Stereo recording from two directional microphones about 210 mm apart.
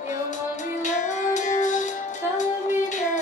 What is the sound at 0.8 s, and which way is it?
Music, 35° left (ahead or behind).